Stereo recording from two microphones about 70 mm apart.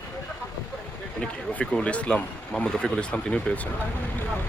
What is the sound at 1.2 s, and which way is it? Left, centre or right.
Speech, centre.